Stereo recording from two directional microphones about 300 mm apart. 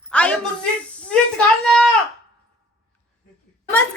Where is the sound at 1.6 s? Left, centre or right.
Centre.